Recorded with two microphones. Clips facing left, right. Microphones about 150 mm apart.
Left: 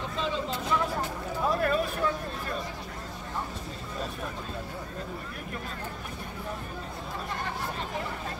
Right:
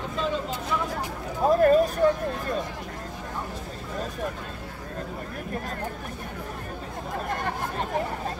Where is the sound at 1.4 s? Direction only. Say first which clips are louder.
Right 9 dB; 40° right (ahead or behind).